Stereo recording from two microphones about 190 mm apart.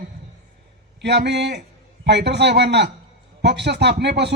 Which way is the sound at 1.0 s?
60° right (ahead or behind).